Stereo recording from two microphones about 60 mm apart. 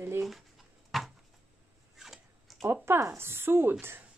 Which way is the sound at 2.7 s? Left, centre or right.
Right.